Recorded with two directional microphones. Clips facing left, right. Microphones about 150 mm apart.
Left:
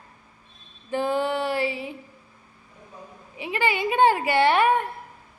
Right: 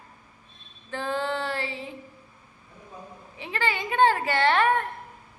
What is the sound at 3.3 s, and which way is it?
A woman's voice, 10° left (ahead or behind).